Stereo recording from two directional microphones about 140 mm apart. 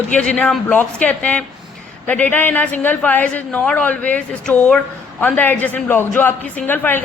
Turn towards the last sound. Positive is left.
turn(degrees=15)  # may be behind; listen again after turning